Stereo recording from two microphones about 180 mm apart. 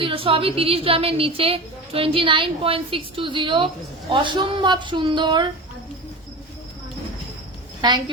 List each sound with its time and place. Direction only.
0.0 s a woman's voice: 30° right (ahead or behind)
7.8 s a woman's voice: 25° right (ahead or behind)